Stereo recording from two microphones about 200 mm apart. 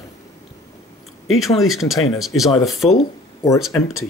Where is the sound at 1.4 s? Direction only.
Centre (ahead or behind).